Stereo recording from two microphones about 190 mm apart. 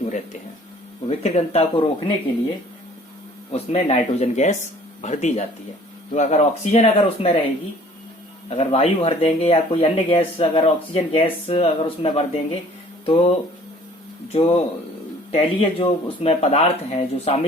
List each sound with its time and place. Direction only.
1.0 s speech: 35° left (ahead or behind)
3.5 s speech: 35° left (ahead or behind)
8.4 s speech: 35° left (ahead or behind)
14.3 s speech: 30° left (ahead or behind)